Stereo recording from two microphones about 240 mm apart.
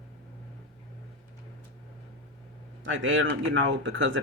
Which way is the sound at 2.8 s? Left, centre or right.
Right.